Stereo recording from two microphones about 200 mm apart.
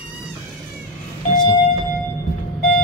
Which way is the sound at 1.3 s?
20° left (ahead or behind).